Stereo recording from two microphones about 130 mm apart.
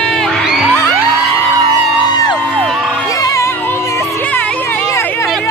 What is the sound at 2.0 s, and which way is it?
Music, 35° left (ahead or behind).